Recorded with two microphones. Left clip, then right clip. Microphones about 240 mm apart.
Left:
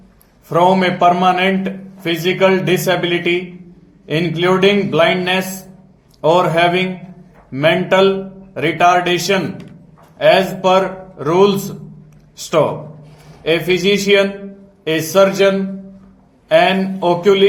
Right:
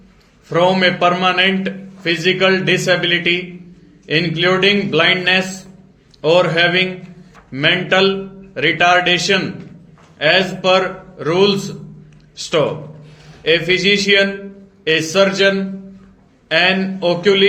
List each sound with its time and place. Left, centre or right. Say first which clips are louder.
0.4 s a man's voice: left 1 dB; left
13.7 s a man's voice: left 2 dB; left